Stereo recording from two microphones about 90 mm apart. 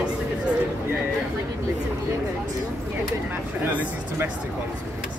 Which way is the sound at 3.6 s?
25° right (ahead or behind).